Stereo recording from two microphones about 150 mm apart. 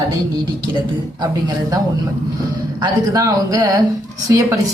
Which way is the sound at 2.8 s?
25° right (ahead or behind).